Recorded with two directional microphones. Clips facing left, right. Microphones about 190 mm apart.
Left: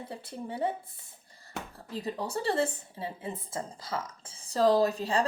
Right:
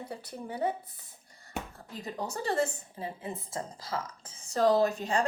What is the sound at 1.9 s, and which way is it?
A woman's voice, 30° left (ahead or behind).